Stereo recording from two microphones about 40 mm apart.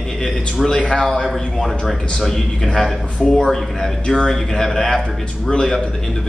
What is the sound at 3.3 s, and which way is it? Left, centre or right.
Speech, centre.